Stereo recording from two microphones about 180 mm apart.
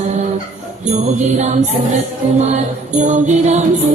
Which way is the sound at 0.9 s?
40° right (ahead or behind).